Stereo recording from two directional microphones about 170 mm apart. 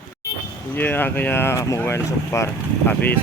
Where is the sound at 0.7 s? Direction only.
10° left (ahead or behind).